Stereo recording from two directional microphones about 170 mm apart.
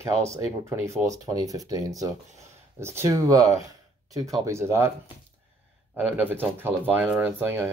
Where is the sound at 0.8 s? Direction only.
20° right (ahead or behind).